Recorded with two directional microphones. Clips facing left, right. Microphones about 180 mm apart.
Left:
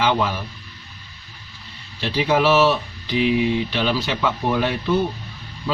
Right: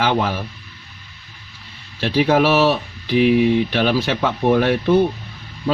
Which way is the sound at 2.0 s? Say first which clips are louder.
Right 4 dB; 55° right (ahead or behind).